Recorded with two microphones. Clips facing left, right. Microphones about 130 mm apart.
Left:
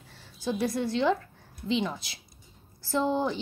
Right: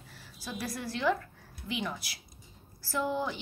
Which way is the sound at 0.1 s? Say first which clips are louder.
Left 10 dB; 25° left (ahead or behind).